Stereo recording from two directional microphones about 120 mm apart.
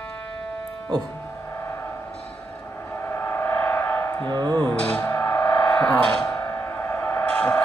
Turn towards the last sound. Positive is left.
turn(degrees=15)  # may be behind; listen again after turning